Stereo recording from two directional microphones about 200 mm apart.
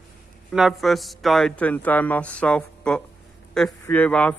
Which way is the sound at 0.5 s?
Centre (ahead or behind).